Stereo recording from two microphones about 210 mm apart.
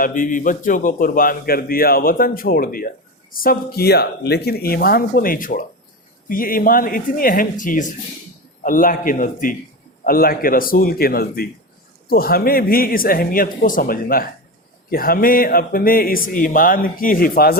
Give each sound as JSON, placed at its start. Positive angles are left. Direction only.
{"t": 0.0, "sound": "a man's voice", "side_deg": 40}